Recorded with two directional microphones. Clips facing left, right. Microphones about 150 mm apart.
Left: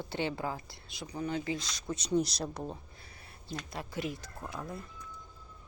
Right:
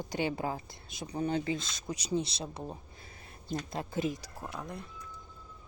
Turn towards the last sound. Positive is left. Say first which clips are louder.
# even
turn(degrees=0)  # may be behind; listen again after turning